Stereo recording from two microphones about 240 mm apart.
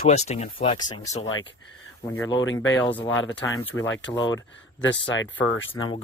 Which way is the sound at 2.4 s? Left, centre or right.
Left.